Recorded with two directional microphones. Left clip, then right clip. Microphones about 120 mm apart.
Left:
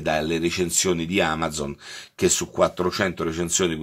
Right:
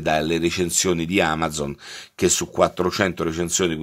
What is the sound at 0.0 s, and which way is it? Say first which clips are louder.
Speech: right 2 dB; 45° right (ahead or behind).